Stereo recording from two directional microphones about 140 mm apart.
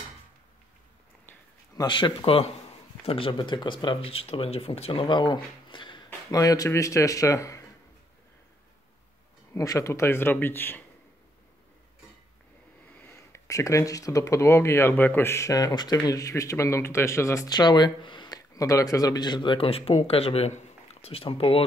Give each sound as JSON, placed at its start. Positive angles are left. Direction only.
{"t": 1.8, "sound": "speech", "side_deg": 35}
{"t": 5.0, "sound": "speech", "side_deg": 35}
{"t": 9.5, "sound": "speech", "side_deg": 20}
{"t": 13.0, "sound": "speech", "side_deg": 20}